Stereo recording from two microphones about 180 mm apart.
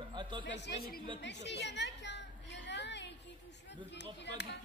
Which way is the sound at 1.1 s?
70° left (ahead or behind).